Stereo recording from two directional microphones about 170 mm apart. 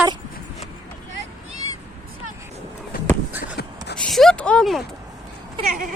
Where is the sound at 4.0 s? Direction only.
Centre (ahead or behind).